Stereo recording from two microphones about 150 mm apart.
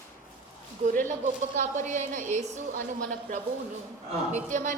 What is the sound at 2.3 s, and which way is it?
A woman's voice, 60° right (ahead or behind).